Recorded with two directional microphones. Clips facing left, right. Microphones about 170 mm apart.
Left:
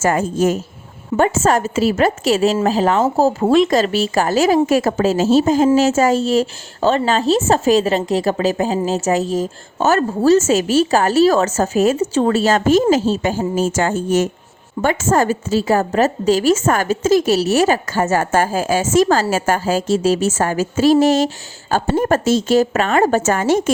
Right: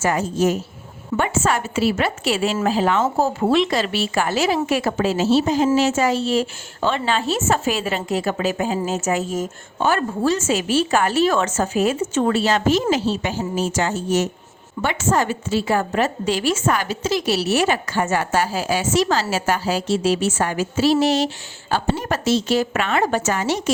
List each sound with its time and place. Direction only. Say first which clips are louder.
0.0 s a woman's voice: left 3 dB; 50° left (ahead or behind)
1.1 s a woman's voice: left 6 dB; 25° left (ahead or behind)
1.5 s a woman's voice: left 4 dB; 40° left (ahead or behind)